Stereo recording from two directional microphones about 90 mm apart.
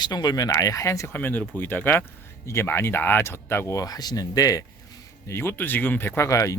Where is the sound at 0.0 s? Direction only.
50° left (ahead or behind).